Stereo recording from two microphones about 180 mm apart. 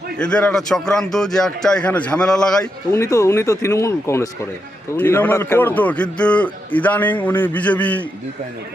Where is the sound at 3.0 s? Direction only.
15° left (ahead or behind).